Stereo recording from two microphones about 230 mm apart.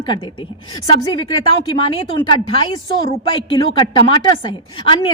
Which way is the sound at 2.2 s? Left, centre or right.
Centre.